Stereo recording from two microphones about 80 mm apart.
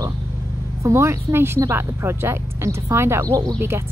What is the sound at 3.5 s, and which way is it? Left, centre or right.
Speech, right.